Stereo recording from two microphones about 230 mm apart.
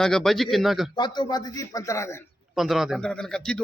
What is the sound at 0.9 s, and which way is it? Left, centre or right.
A man's voice, centre.